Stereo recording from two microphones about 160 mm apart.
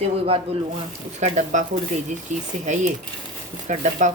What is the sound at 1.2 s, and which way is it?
Speech, 45° right (ahead or behind).